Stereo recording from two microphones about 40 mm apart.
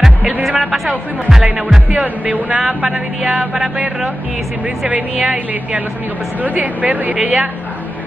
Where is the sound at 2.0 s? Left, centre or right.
Right.